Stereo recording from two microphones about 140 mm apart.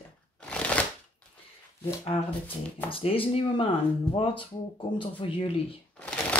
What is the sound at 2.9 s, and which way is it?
Speech, 40° left (ahead or behind).